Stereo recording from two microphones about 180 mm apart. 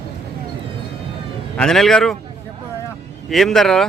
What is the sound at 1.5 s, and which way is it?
Speech, 5° left (ahead or behind).